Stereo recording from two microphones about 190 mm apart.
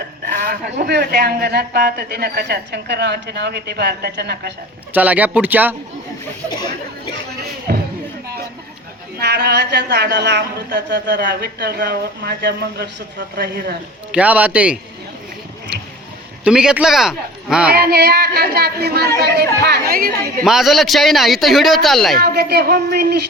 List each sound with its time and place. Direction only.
0.3 s a woman's voice: 45° right (ahead or behind)
4.9 s speech: 10° right (ahead or behind)
7.7 s a sound: 50° right (ahead or behind)
9.1 s a woman's voice: 60° right (ahead or behind)
14.1 s speech: 10° right (ahead or behind)
16.4 s a man's voice: 5° right (ahead or behind)
17.7 s a woman's voice: 60° right (ahead or behind)
20.4 s a man's voice: centre (ahead or behind)
22.2 s a woman's voice: 60° right (ahead or behind)